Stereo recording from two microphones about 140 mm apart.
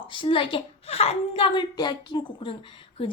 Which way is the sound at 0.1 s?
35° left (ahead or behind).